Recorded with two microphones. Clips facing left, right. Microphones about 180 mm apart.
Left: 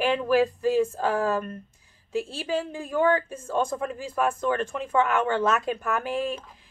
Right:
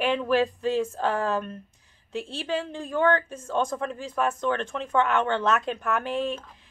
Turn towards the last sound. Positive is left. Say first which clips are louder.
# even
turn(degrees=5)  # may be behind; listen again after turning